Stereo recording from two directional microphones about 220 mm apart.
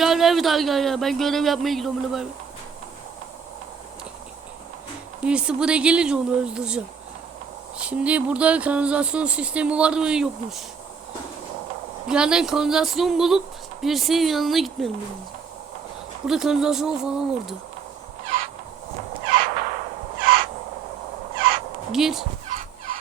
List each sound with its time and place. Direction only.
0.0 s speech: centre (ahead or behind)
5.2 s speech: 5° right (ahead or behind)
12.0 s speech: 5° right (ahead or behind)
16.2 s speech: centre (ahead or behind)
19.2 s crow: 40° right (ahead or behind)
20.2 s owl: 40° right (ahead or behind)
21.3 s crow: 40° right (ahead or behind)
21.9 s speech: centre (ahead or behind)
22.4 s fowl: 35° right (ahead or behind)